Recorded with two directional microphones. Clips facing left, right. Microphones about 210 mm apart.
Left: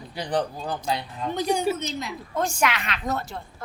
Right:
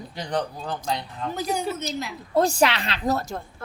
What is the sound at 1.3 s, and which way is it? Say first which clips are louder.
Speech: left 3 dB; 5° right (ahead or behind).